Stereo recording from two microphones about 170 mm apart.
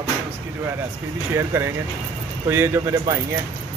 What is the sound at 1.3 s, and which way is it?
Speech, 15° right (ahead or behind).